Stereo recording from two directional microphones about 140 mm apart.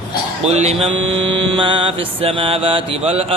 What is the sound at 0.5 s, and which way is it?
A man's voice, 50° right (ahead or behind).